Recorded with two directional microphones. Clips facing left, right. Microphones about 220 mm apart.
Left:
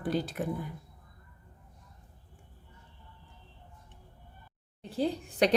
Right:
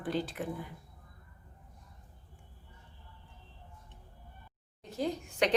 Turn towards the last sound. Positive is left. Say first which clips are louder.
# left 4 dB
turn(degrees=35)  # may be behind; listen again after turning